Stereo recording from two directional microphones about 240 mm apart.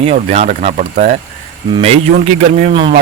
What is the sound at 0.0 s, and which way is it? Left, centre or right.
Speech, right.